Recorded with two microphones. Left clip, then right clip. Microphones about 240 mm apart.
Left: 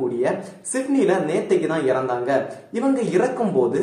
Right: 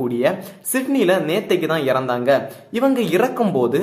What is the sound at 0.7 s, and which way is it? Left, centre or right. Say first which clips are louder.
Speech: right 2 dB; right.